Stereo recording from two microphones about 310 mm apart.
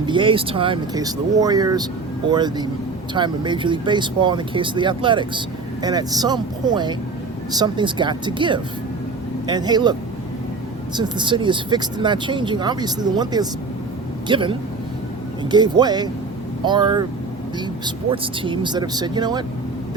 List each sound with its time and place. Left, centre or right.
0.0 s speech: centre
10.9 s speech: centre